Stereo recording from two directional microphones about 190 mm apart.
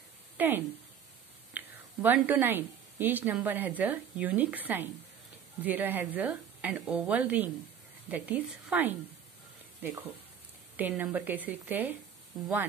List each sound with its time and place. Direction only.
0.4 s a woman's voice: 10° right (ahead or behind)
10.8 s a woman's voice: 10° right (ahead or behind)